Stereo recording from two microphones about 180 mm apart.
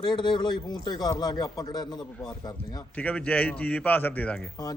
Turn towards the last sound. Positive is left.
turn(degrees=5)  # may be behind; listen again after turning